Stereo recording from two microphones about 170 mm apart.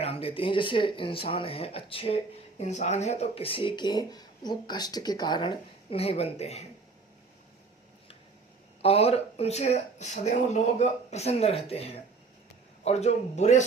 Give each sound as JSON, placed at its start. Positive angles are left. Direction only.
{"t": 0.0, "sound": "speech", "side_deg": 35}
{"t": 8.8, "sound": "speech", "side_deg": 35}